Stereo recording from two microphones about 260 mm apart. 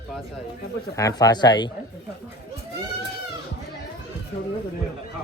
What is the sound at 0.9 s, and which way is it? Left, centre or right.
Speech, centre.